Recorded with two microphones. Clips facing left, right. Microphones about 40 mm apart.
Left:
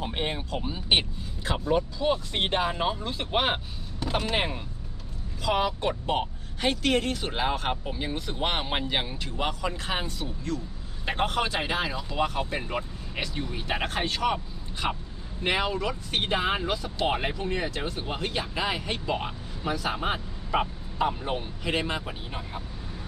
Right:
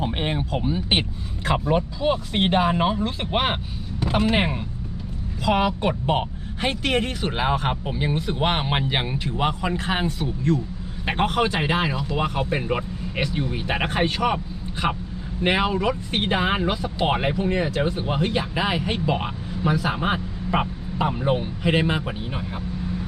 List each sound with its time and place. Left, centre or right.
0.0 s speech: right
1.6 s speech: centre